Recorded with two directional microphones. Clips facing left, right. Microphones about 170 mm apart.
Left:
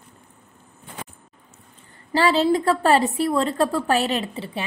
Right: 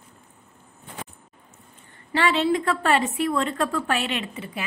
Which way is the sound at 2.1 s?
35° left (ahead or behind).